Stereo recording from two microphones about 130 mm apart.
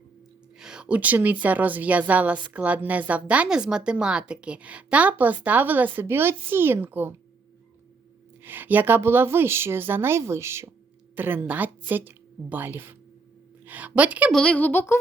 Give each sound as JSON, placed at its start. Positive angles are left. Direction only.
{"t": 0.6, "sound": "a woman's voice", "side_deg": -5}
{"t": 8.4, "sound": "a woman's voice", "side_deg": -15}
{"t": 14.3, "sound": "speech", "side_deg": 10}